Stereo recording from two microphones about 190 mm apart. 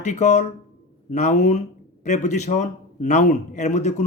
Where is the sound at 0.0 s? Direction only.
40° left (ahead or behind).